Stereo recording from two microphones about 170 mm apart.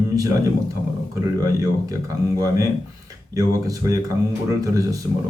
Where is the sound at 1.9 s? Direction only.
20° right (ahead or behind).